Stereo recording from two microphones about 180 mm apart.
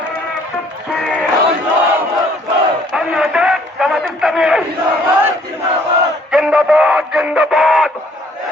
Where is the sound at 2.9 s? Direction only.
Centre (ahead or behind).